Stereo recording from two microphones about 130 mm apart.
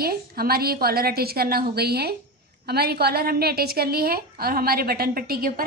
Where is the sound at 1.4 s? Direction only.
90° right.